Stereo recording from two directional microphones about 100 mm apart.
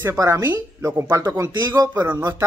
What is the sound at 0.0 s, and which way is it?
Speech, 25° right (ahead or behind).